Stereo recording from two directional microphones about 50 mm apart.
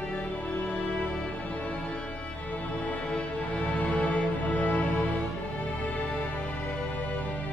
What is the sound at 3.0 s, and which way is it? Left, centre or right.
Music, left.